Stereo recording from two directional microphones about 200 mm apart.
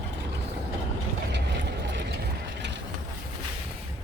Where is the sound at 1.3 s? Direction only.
60° right (ahead or behind).